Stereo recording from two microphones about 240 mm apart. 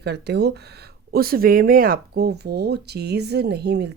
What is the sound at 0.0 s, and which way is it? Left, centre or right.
Speech, right.